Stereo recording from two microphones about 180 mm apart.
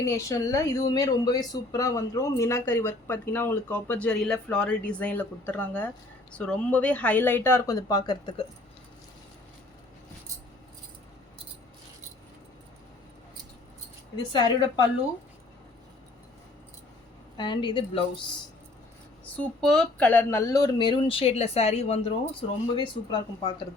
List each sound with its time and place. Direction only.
0.0 s speech: 15° left (ahead or behind)
17.3 s speech: 25° left (ahead or behind)
19.2 s speech: 5° left (ahead or behind); by 23.5 s 25° left (ahead or behind)